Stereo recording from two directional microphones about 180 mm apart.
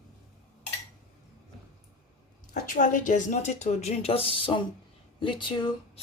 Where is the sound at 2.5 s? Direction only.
45° left (ahead or behind); by 6.0 s 25° left (ahead or behind).